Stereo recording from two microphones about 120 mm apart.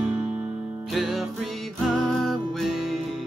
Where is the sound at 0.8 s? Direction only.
Centre (ahead or behind).